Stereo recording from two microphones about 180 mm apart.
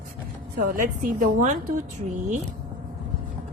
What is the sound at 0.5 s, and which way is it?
A woman's voice, 50° right (ahead or behind).